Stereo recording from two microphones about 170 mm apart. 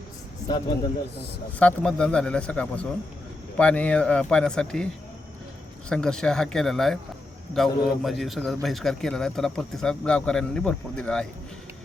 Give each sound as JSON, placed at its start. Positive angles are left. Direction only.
{"t": 1.5, "sound": "speech", "side_deg": 5}
{"t": 5.9, "sound": "speech", "side_deg": 5}